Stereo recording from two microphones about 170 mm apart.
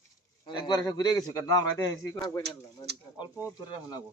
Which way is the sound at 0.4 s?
25° left (ahead or behind).